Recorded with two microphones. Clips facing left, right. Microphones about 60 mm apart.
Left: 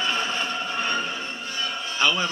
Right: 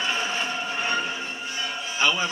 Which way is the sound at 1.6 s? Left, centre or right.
Centre.